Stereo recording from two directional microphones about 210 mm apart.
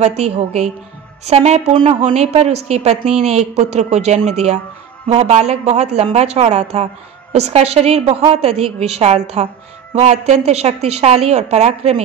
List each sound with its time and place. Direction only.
0.0 s a woman's voice: 30° right (ahead or behind)